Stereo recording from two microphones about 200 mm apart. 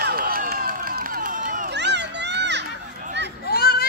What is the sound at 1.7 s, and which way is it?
Children playing, 60° right (ahead or behind).